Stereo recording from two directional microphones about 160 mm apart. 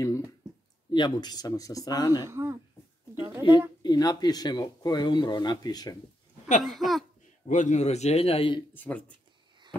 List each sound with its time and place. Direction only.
0.9 s speech: 25° left (ahead or behind)
2.2 s speech: 15° right (ahead or behind)
3.2 s a sound: 15° right (ahead or behind)
3.8 s speech: 25° left (ahead or behind)
6.6 s speech: centre (ahead or behind)
7.4 s a man's voice: 50° left (ahead or behind)
8.7 s speech: 10° left (ahead or behind)